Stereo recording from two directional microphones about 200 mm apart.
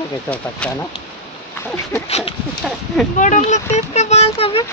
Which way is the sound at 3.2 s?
35° left (ahead or behind).